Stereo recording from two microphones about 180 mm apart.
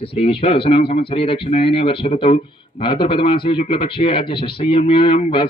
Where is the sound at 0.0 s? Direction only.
30° left (ahead or behind).